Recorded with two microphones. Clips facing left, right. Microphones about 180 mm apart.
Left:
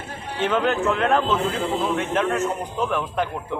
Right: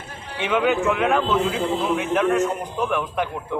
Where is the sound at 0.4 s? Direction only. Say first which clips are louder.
Right 1 dB; 10° right (ahead or behind).